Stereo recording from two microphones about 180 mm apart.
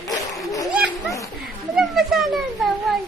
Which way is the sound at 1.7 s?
Centre (ahead or behind).